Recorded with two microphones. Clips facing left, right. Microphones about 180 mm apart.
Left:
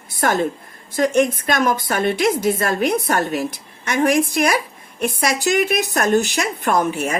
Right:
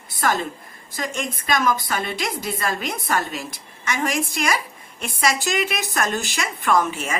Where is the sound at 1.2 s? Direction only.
60° left (ahead or behind).